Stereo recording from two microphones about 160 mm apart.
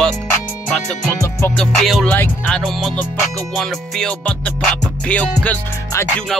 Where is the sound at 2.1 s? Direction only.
10° left (ahead or behind).